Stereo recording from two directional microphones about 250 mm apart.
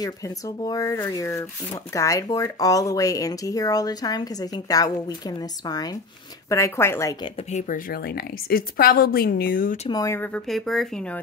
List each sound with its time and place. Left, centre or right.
0.7 s speech: centre
6.5 s speech: centre
7.5 s a woman's voice: left
9.8 s speech: centre